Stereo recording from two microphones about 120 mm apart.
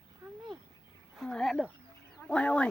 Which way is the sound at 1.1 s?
5° left (ahead or behind).